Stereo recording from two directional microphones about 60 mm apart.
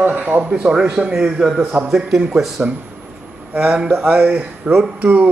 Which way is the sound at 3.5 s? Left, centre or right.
Right.